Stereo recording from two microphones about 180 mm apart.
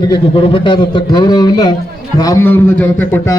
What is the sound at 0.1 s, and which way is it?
A man's voice, 30° left (ahead or behind).